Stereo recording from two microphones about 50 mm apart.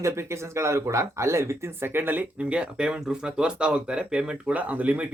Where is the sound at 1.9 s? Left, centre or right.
Right.